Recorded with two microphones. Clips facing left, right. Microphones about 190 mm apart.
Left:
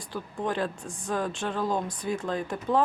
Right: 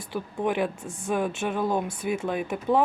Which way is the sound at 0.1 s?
20° right (ahead or behind).